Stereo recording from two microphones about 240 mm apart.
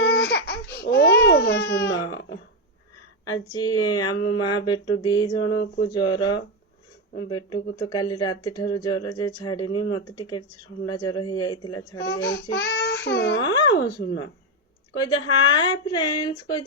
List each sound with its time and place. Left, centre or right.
0.0 s baby cry: left
3.5 s speech: centre
11.9 s a child's voice: left
13.4 s speech: centre
13.8 s a child's voice: left
15.0 s speech: centre